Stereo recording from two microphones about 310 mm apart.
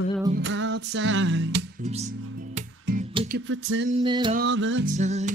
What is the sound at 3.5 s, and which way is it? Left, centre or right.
Music, right.